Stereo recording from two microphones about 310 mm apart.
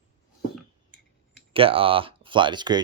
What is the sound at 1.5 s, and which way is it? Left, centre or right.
Speech, centre.